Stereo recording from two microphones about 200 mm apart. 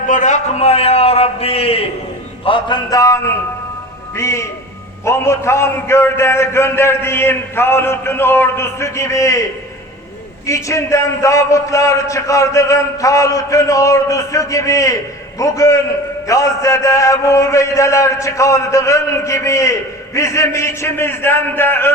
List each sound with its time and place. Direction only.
0.1 s a man's voice: 35° left (ahead or behind); by 21.9 s 10° left (ahead or behind)